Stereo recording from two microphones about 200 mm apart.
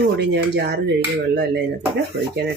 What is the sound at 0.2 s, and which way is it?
Speech, 60° right (ahead or behind).